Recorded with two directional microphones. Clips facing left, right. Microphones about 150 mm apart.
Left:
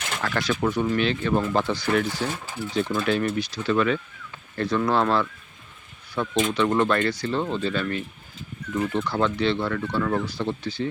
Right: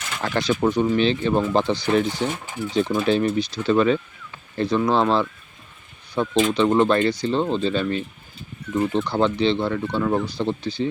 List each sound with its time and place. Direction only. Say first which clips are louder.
0.2 s speech: right 4 dB; 25° right (ahead or behind)
4.5 s speech: right 3 dB; 20° right (ahead or behind)